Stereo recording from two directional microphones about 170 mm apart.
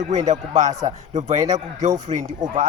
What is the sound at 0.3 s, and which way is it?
A man's voice, 45° right (ahead or behind).